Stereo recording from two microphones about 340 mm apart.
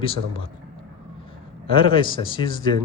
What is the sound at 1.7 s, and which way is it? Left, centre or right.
Speech, centre.